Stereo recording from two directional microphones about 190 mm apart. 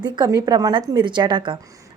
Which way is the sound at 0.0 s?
20° right (ahead or behind).